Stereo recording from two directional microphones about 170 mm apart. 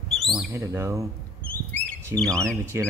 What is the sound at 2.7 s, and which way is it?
Speech, 15° right (ahead or behind).